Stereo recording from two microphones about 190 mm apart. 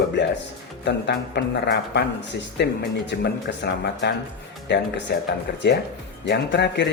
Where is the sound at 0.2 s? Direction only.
70° left (ahead or behind).